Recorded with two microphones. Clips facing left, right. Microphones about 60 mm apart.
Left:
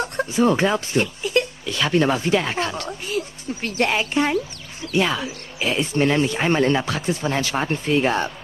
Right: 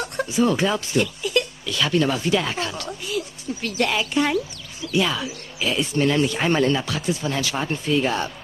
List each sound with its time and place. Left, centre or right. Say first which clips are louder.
0.0 s speech: left 2 dB; left